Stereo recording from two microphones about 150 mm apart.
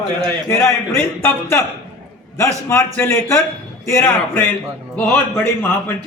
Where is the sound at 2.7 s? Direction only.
15° left (ahead or behind).